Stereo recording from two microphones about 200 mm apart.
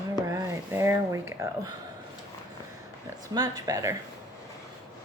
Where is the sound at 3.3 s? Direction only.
15° right (ahead or behind).